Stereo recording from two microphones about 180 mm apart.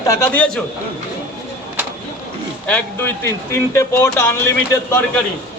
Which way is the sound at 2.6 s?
10° left (ahead or behind).